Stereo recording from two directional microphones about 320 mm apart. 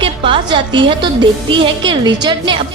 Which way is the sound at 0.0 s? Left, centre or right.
Centre.